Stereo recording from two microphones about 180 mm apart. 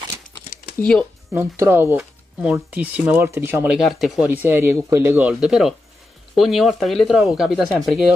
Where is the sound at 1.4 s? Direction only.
15° right (ahead or behind).